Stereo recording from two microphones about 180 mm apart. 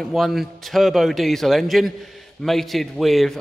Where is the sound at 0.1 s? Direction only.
Centre (ahead or behind).